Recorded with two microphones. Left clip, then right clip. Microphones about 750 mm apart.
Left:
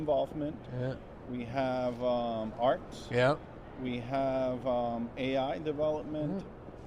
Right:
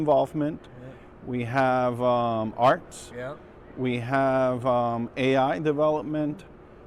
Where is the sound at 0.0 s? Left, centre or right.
Right.